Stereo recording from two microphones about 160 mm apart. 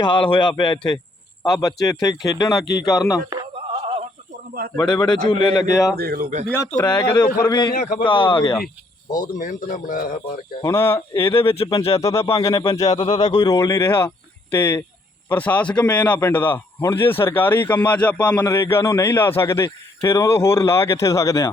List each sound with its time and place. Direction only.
0.0 s speech: 30° left (ahead or behind)
3.2 s music: 25° right (ahead or behind)
4.8 s speech: 25° left (ahead or behind)
6.0 s a man's voice: 75° right (ahead or behind)
6.7 s speech: 20° left (ahead or behind)
7.7 s speech: 65° left (ahead or behind)
8.0 s speech: 30° left (ahead or behind)
9.1 s speech: 50° left (ahead or behind)
10.6 s a man's voice: 20° left (ahead or behind)
11.3 s speech: 35° left (ahead or behind)
11.9 s speech: 20° left (ahead or behind)
13.1 s speech: 45° left (ahead or behind)
13.3 s a man's voice: 25° left (ahead or behind)